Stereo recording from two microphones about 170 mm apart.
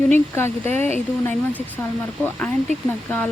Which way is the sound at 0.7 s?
40° right (ahead or behind).